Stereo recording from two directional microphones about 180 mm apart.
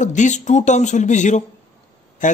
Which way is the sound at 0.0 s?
40° left (ahead or behind).